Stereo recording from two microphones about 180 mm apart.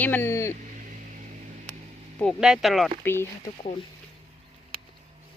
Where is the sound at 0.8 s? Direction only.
45° right (ahead or behind).